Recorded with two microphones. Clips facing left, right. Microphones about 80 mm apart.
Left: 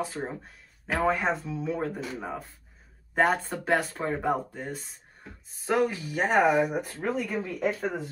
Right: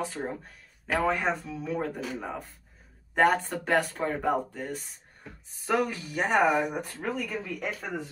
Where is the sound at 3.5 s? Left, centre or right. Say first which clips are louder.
Even; centre.